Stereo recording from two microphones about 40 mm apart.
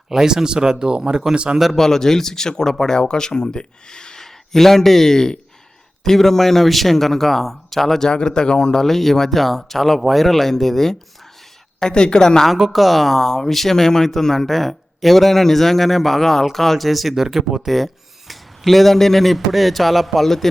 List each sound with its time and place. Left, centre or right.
0.1 s speech: centre
1.7 s speech: centre
8.0 s speech: centre
8.7 s speech: centre
11.8 s speech: centre
12.7 s speech: centre
17.2 s speech: centre
17.7 s speech: centre